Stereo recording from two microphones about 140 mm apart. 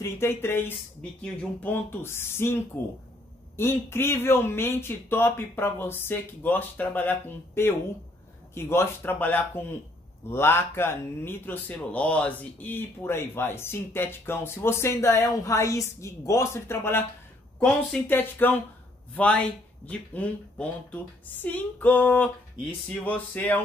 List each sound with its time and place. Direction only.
0.0 s speech: 15° left (ahead or behind)